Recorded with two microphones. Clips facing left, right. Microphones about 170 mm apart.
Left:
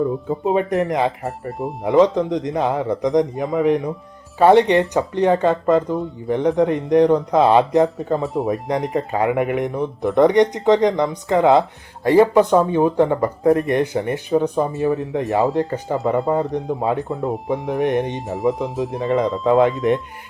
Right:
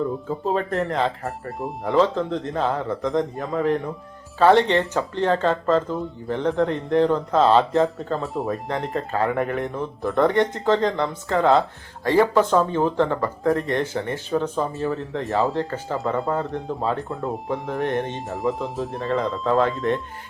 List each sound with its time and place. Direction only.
0.0 s speech: 15° left (ahead or behind)
1.2 s speech: centre (ahead or behind)
1.9 s speech: 15° left (ahead or behind)
8.2 s speech: centre (ahead or behind)
9.0 s speech: 15° left (ahead or behind)
16.0 s speech: centre (ahead or behind)
16.3 s speech: 20° left (ahead or behind)
17.1 s speech: centre (ahead or behind)
17.7 s speech: 15° left (ahead or behind)
18.3 s speech: centre (ahead or behind)
19.5 s speech: 15° left (ahead or behind)